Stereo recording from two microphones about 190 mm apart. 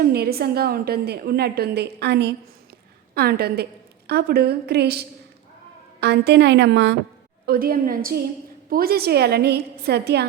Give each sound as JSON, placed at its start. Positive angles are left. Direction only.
{"t": 0.0, "sound": "a woman's voice", "side_deg": -55}
{"t": 7.4, "sound": "a woman's voice", "side_deg": -50}